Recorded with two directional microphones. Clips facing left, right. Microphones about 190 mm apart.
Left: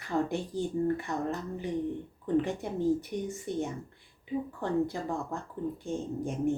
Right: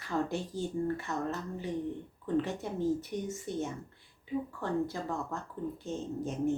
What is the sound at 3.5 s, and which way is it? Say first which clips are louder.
Speech: left 3 dB; 55° left (ahead or behind).